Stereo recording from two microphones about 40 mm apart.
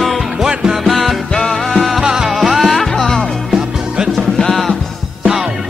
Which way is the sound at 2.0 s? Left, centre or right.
Centre.